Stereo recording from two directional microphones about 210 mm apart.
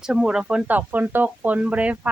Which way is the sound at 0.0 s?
5° right (ahead or behind).